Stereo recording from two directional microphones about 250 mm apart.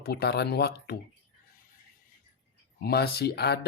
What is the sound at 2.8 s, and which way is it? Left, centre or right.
Speech, left.